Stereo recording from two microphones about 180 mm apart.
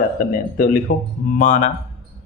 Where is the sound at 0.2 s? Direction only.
50° left (ahead or behind).